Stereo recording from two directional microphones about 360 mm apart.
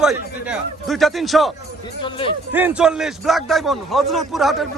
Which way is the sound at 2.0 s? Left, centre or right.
Centre.